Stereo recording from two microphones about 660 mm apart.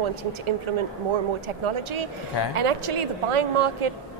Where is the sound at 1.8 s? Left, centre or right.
Right.